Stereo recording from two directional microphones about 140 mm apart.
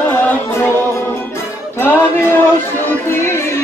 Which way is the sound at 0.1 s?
15° left (ahead or behind).